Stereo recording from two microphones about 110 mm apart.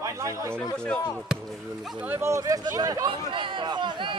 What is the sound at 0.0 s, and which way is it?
Speech, 30° right (ahead or behind).